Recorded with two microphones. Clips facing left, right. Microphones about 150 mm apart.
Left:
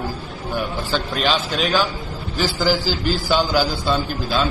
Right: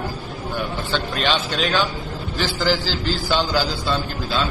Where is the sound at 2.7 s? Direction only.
45° left (ahead or behind).